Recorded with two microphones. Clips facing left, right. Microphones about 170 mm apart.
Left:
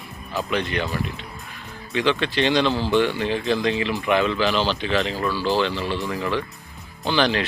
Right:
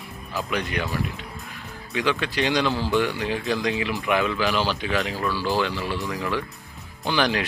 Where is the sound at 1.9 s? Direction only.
10° right (ahead or behind).